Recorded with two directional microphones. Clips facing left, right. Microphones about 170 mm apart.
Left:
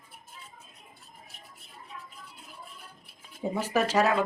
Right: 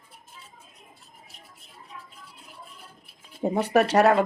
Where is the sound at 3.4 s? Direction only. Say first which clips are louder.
Right 6 dB; 65° right (ahead or behind).